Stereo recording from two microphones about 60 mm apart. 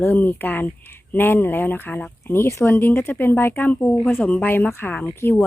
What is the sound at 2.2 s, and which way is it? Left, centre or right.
Speech, left.